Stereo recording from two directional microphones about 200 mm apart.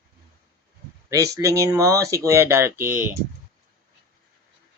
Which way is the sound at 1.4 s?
15° right (ahead or behind).